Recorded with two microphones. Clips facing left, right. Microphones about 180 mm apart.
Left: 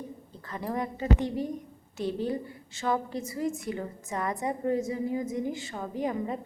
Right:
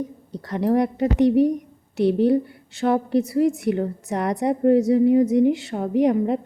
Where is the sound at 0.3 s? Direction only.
75° right (ahead or behind).